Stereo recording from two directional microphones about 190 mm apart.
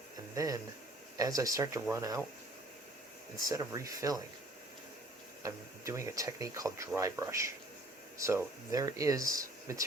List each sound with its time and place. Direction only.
0.3 s speech: 20° right (ahead or behind)
3.4 s speech: 15° right (ahead or behind)
5.4 s speech: 15° right (ahead or behind)